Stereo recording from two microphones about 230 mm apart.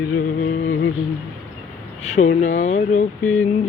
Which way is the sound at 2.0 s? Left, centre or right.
Left.